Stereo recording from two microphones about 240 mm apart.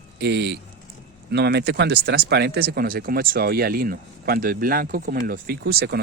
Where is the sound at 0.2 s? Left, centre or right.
Right.